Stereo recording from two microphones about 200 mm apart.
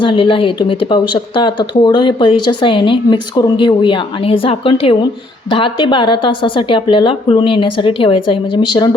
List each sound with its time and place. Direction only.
0.0 s speech: 25° left (ahead or behind)